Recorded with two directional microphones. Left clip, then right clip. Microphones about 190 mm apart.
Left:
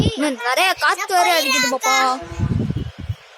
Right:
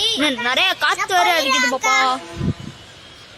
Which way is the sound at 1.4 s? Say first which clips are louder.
Right 1 dB; 25° right (ahead or behind).